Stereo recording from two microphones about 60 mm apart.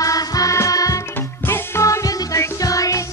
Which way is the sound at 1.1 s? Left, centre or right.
Left.